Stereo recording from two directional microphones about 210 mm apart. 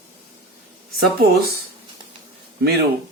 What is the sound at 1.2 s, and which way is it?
Speech, 45° right (ahead or behind).